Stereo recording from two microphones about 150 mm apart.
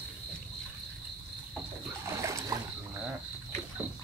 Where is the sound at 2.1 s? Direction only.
20° right (ahead or behind).